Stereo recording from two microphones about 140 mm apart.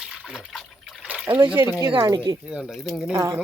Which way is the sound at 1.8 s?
25° right (ahead or behind).